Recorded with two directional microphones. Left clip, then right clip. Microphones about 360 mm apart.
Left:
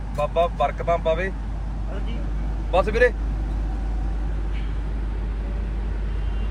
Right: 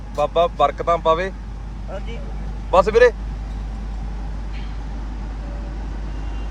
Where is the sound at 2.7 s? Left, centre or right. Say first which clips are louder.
Right 6 dB; centre.